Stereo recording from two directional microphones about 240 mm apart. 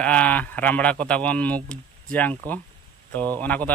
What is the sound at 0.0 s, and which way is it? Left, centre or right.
Speech, centre.